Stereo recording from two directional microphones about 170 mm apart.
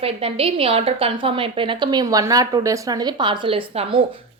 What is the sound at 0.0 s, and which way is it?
A woman's voice, 35° right (ahead or behind).